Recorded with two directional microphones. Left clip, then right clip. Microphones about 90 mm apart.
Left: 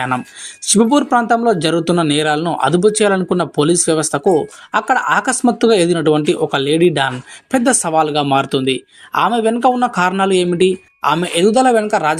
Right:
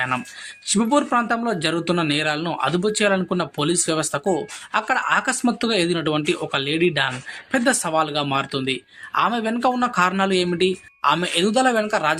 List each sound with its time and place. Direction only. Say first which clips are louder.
0.6 s speech: left 6 dB; 50° left (ahead or behind)